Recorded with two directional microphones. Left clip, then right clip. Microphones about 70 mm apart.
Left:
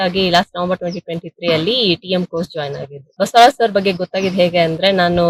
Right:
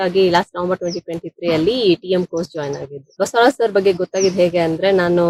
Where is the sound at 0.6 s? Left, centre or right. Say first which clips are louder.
Even; right.